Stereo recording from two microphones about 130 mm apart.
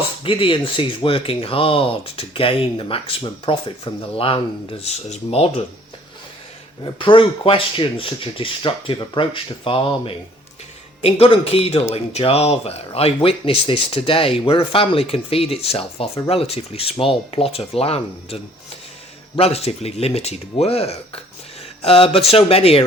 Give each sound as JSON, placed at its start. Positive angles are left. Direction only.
{"t": 0.2, "sound": "speech", "side_deg": 40}
{"t": 6.8, "sound": "speech", "side_deg": 40}
{"t": 19.4, "sound": "speech", "side_deg": 50}